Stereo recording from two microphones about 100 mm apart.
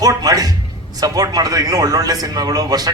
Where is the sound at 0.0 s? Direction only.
40° right (ahead or behind).